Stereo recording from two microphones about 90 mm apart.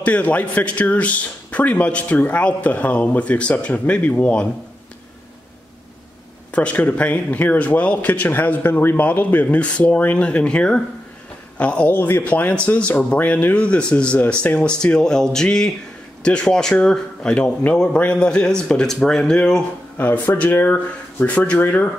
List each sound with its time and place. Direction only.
0.0 s speech: 15° left (ahead or behind)
6.5 s speech: 15° left (ahead or behind)
20.0 s speech: 20° left (ahead or behind)